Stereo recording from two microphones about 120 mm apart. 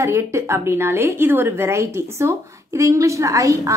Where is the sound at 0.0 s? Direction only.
25° right (ahead or behind).